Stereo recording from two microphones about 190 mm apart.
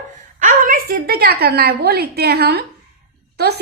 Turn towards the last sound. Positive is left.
turn(degrees=-60)  # may be behind; listen again after turning